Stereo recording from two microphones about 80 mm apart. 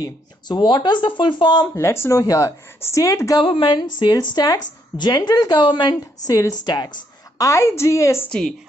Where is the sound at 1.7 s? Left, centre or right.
Left.